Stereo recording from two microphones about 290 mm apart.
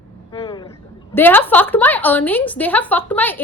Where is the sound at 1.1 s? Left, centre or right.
Centre.